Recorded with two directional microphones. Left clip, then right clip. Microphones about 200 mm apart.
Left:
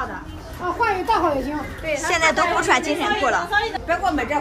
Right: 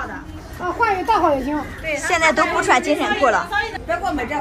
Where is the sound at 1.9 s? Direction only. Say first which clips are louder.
Right 2 dB; 5° left (ahead or behind).